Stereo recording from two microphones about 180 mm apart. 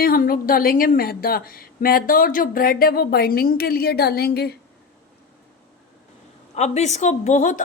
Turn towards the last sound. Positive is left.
turn(degrees=45)  # may be behind; listen again after turning